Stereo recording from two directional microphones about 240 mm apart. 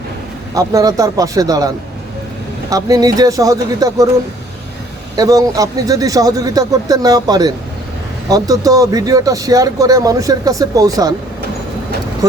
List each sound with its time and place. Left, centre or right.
0.5 s speech: centre
5.1 s speech: centre
12.2 s speech: centre